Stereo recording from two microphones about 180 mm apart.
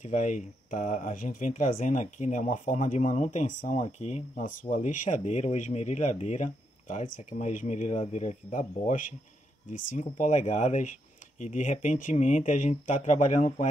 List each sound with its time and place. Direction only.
0.0 s speech: 45° left (ahead or behind)